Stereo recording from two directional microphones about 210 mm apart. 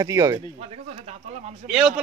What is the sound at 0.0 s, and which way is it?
Speech, 15° right (ahead or behind).